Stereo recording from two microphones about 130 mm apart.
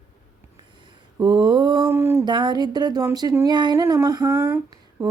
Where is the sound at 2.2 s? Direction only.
35° right (ahead or behind).